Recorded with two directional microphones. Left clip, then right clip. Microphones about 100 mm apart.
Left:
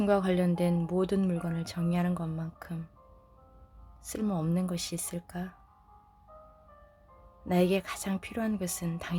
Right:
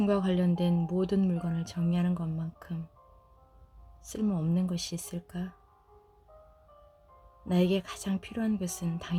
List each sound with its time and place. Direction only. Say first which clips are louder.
0.0 s speech: left 2 dB; 30° right (ahead or behind)
4.0 s speech: even; 30° right (ahead or behind)
7.4 s speech: left 2 dB; 25° right (ahead or behind)